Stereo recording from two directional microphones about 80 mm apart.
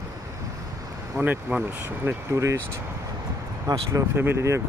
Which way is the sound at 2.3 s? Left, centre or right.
Right.